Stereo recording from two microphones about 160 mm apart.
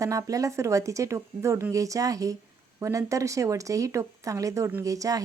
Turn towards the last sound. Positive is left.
turn(degrees=-20)  # may be behind; listen again after turning